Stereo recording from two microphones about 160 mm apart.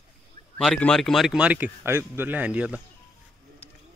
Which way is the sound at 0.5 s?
5° left (ahead or behind).